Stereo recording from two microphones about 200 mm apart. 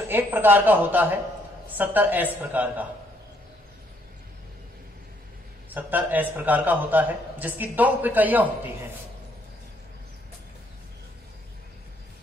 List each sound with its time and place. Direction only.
0.1 s a man's voice: 10° right (ahead or behind)
5.7 s a man's voice: 10° right (ahead or behind)